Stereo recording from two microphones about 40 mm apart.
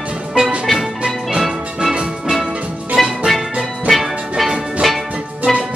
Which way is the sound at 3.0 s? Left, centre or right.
Centre.